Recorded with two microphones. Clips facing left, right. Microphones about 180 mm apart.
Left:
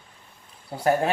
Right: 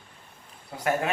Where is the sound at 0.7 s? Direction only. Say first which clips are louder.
Left 5 dB; 35° left (ahead or behind).